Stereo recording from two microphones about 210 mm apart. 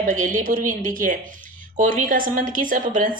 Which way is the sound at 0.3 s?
40° right (ahead or behind).